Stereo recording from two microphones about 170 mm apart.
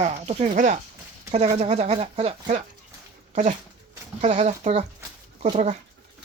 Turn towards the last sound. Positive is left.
turn(degrees=-45)  # may be behind; listen again after turning